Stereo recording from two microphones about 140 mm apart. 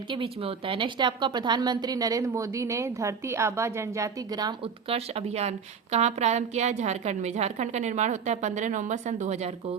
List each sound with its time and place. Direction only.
0.1 s a woman's voice: 40° right (ahead or behind)
4.6 s a woman's voice: 45° right (ahead or behind)